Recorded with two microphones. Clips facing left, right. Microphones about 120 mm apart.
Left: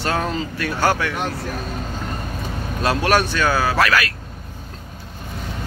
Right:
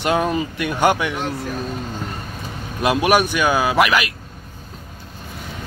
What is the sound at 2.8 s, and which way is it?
Speech, 15° right (ahead or behind).